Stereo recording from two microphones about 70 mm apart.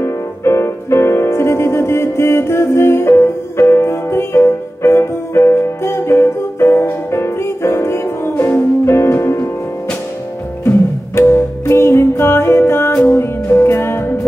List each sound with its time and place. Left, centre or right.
0.0 s music: left
11.1 s music: left